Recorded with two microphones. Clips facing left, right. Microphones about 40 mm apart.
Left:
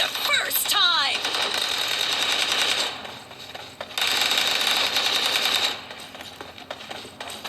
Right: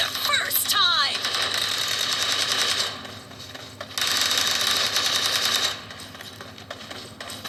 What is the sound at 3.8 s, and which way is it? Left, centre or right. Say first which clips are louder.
Sewing machine: left 2 dB; left.